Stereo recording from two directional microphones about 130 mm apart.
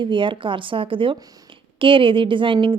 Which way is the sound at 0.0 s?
40° right (ahead or behind).